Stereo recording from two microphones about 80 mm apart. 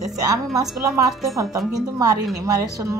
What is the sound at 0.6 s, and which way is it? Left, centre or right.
Speech, right.